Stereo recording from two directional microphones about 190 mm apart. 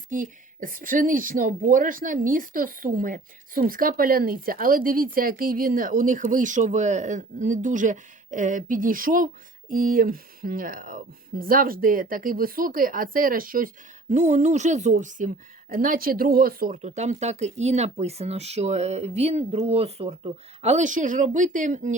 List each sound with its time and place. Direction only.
0.1 s speech: 45° right (ahead or behind)